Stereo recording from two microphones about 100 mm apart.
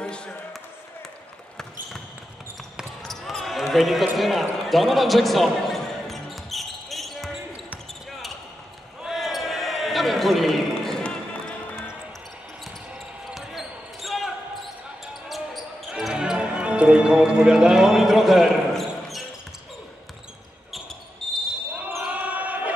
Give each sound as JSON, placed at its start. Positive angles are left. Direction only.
{"t": 0.0, "sound": "basketball bounce", "side_deg": 10}
{"t": 2.8, "sound": "basketball bounce", "side_deg": 0}
{"t": 9.0, "sound": "basketball bounce", "side_deg": 0}
{"t": 13.3, "sound": "basketball bounce", "side_deg": 0}
{"t": 21.2, "sound": "basketball bounce", "side_deg": 5}
{"t": 22.1, "sound": "basketball bounce", "side_deg": -15}